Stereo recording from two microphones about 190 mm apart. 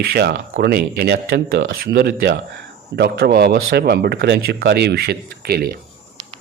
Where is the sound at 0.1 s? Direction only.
55° right (ahead or behind).